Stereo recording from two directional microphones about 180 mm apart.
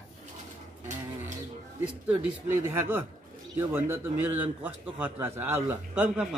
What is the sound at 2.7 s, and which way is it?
A man's voice, 10° right (ahead or behind).